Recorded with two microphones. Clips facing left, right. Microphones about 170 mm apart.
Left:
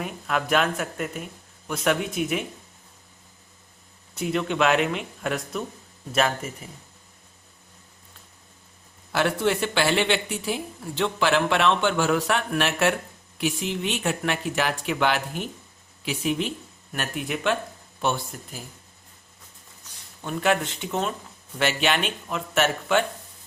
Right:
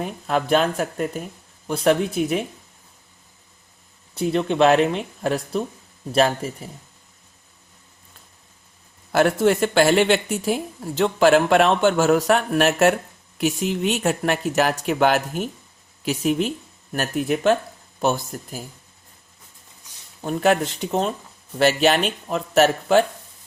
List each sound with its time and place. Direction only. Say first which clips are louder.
0.0 s speech: right 4 dB; 30° right (ahead or behind)
4.1 s speech: right 4 dB; 35° right (ahead or behind)
9.1 s speech: right 6 dB; 45° right (ahead or behind)
20.2 s speech: right 5 dB; 40° right (ahead or behind)